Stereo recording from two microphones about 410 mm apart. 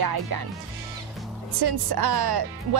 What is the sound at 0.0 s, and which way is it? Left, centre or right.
Speech, right.